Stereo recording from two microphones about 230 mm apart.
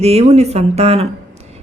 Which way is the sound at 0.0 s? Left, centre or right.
Right.